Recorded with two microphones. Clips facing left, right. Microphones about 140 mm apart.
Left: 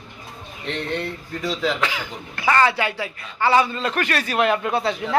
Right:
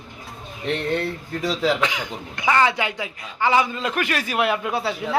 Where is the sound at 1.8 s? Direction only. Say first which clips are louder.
Right 1 dB; 20° right (ahead or behind).